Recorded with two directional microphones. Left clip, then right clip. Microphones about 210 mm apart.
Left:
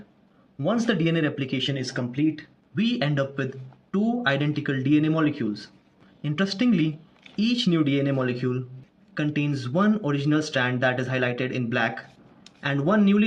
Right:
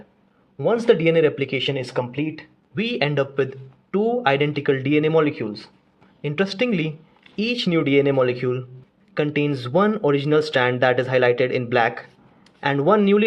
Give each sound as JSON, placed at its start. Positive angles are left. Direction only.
{"t": 0.6, "sound": "speech", "side_deg": -20}